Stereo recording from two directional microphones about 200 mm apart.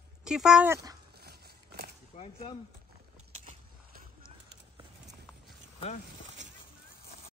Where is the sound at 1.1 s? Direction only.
55° right (ahead or behind).